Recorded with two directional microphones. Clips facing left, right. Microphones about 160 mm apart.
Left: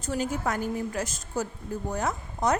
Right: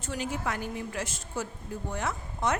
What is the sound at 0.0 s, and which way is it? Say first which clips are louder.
A woman's voice: left 4 dB; 40° left (ahead or behind).